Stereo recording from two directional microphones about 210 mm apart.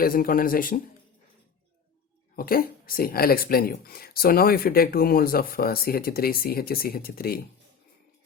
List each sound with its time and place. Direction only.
0.0 s speech: 45° left (ahead or behind)
2.3 s speech: 45° left (ahead or behind)